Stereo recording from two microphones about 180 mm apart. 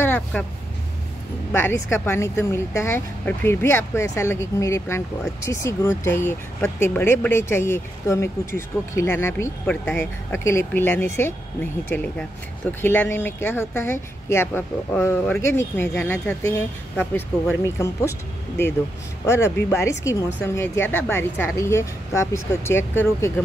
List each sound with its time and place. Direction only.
0.0 s speech: 10° left (ahead or behind)
1.9 s speech: 15° left (ahead or behind)
19.2 s speech: 15° left (ahead or behind)